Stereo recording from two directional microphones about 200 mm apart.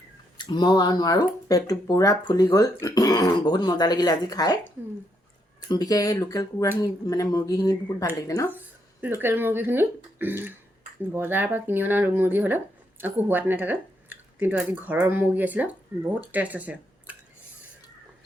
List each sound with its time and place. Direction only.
0.3 s speech: 20° left (ahead or behind)
5.6 s speech: 20° left (ahead or behind)
8.4 s speech: 10° right (ahead or behind)